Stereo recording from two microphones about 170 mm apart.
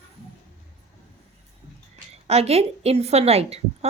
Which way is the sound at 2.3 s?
40° right (ahead or behind).